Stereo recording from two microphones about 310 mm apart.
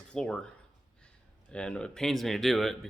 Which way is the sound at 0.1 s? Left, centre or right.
Centre.